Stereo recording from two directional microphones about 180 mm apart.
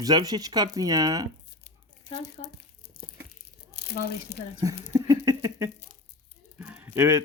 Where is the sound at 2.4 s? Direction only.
40° left (ahead or behind).